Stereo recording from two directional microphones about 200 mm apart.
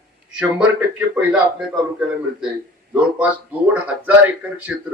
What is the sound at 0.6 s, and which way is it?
Speech, 10° right (ahead or behind).